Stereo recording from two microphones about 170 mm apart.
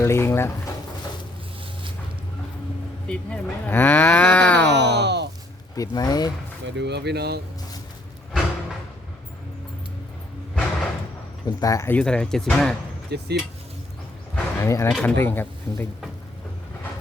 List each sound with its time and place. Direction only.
0.0 s moo: 15° left (ahead or behind)
3.1 s moo: 5° left (ahead or behind)
4.7 s speech: 85° right
5.7 s speech: 20° left (ahead or behind)
6.7 s speech: 85° right
11.4 s moo: 20° left (ahead or behind); by 12.7 s centre (ahead or behind)
13.1 s speech: 75° right (ahead or behind)
14.3 s a sound: 15° left (ahead or behind)
14.9 s moo: 10° left (ahead or behind)